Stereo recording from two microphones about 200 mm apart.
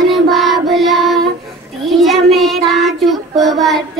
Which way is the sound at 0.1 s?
Centre (ahead or behind).